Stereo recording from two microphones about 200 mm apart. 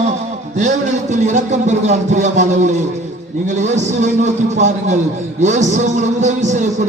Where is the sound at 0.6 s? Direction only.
35° right (ahead or behind).